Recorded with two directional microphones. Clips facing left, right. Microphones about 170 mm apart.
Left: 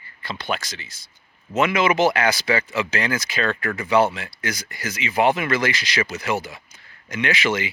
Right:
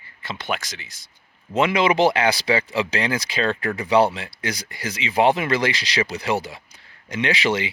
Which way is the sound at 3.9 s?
30° right (ahead or behind).